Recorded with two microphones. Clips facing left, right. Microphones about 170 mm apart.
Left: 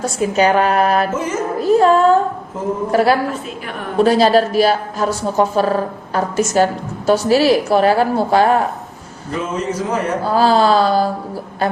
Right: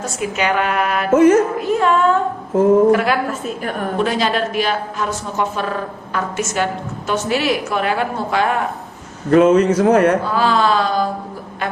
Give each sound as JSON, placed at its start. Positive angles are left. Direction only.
{"t": 0.0, "sound": "a woman's voice", "side_deg": 35}
{"t": 1.1, "sound": "music", "side_deg": -60}
{"t": 1.5, "sound": "a woman's voice", "side_deg": 35}
{"t": 9.3, "sound": "speech", "side_deg": -70}
{"t": 10.2, "sound": "a woman's voice", "side_deg": 35}